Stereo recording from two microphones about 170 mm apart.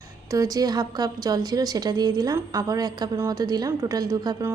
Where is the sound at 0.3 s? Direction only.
20° right (ahead or behind).